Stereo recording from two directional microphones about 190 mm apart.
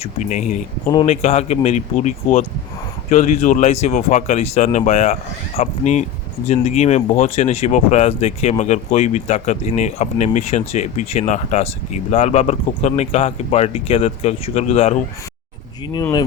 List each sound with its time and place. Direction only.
0.0 s speech: 40° left (ahead or behind)